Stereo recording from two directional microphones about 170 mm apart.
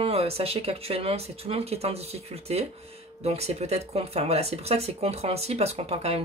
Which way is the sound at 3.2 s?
35° right (ahead or behind).